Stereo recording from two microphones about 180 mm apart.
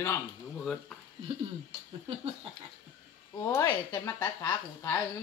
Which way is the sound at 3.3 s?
20° left (ahead or behind).